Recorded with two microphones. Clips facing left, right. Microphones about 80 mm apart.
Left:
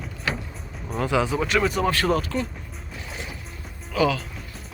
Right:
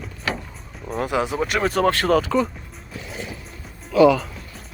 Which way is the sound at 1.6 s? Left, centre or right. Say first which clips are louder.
Right 3 dB; right.